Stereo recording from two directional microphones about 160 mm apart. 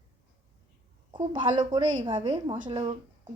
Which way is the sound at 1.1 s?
30° right (ahead or behind).